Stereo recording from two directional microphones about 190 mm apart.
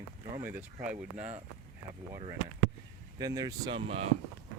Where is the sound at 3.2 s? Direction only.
20° right (ahead or behind).